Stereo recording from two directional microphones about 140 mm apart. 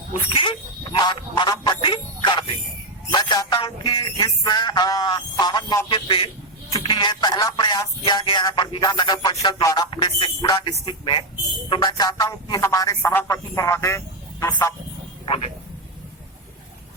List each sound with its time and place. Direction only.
0.1 s speech: 35° left (ahead or behind); by 14.5 s 20° left (ahead or behind)